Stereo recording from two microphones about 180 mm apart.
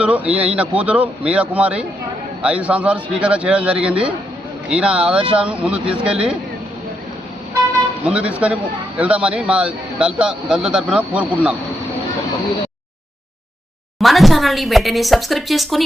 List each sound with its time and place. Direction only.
0.0 s a man's voice: 5° right (ahead or behind)
8.0 s a man's voice: 5° right (ahead or behind)
14.0 s a man's voice: centre (ahead or behind)